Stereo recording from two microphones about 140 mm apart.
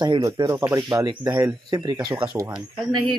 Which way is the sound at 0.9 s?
25° right (ahead or behind).